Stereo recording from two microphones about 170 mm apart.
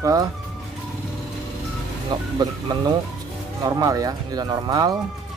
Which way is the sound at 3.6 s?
20° right (ahead or behind).